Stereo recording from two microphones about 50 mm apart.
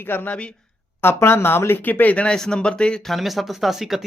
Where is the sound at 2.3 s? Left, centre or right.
Centre.